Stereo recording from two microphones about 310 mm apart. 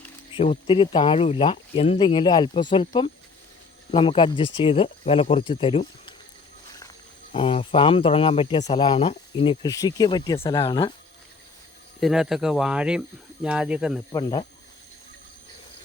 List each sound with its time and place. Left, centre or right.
0.3 s speech: centre
7.3 s speech: centre
11.9 s speech: centre
14.1 s speech: centre